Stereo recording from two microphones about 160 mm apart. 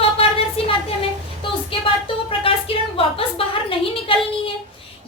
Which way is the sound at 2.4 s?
35° left (ahead or behind).